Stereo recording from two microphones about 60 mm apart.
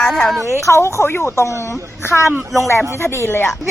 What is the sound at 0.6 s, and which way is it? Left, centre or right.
Speech, left.